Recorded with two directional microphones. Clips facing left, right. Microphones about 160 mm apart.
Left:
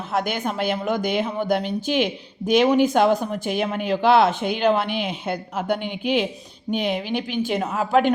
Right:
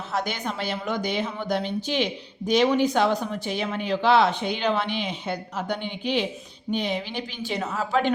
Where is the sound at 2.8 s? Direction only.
50° left (ahead or behind).